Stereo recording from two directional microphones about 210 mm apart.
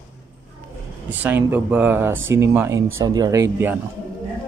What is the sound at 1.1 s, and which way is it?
A man's voice, 10° right (ahead or behind).